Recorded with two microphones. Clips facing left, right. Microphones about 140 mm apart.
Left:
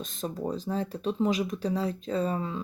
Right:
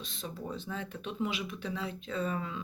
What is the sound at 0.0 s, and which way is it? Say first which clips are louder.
Speech: left 8 dB; 45° left (ahead or behind).